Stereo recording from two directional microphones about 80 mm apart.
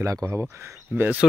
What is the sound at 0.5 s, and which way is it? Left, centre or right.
Speech, right.